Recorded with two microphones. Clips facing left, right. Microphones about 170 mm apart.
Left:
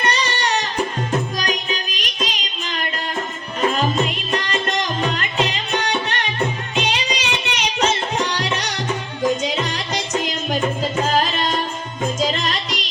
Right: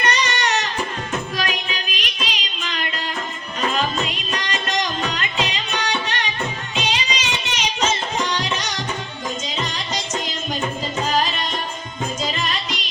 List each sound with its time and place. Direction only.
0.0 s music: 30° left (ahead or behind)
4.0 s music: 55° left (ahead or behind)
11.2 s tabla: 50° left (ahead or behind)
12.2 s music: 45° left (ahead or behind)